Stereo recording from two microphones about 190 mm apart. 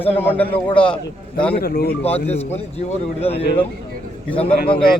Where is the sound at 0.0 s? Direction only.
10° left (ahead or behind).